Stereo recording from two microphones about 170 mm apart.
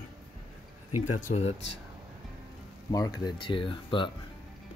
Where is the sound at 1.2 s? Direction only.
40° left (ahead or behind).